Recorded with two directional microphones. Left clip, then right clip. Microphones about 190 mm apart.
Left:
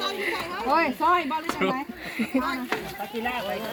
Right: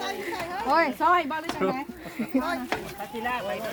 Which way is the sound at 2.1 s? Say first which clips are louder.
Left 1 dB; 15° right (ahead or behind).